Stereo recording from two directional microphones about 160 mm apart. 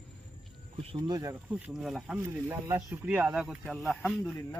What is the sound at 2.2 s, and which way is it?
Speech, 15° right (ahead or behind).